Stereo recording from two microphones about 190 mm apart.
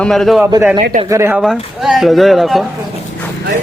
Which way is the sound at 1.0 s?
15° right (ahead or behind).